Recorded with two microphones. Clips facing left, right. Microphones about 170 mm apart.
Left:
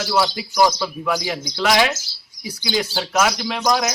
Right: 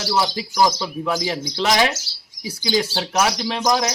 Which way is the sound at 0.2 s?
20° right (ahead or behind).